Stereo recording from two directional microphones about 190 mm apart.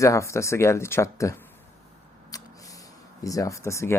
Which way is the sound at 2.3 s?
20° left (ahead or behind).